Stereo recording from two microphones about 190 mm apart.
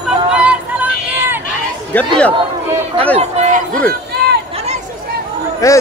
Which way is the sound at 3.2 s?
35° right (ahead or behind).